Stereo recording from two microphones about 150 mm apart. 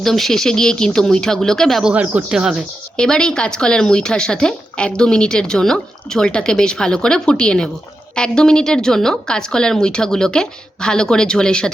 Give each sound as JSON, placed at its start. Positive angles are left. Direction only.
{"t": 0.0, "sound": "speech", "side_deg": 0}
{"t": 1.9, "sound": "speech", "side_deg": -10}